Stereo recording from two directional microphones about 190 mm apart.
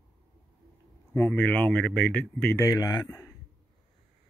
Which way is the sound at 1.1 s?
10° left (ahead or behind).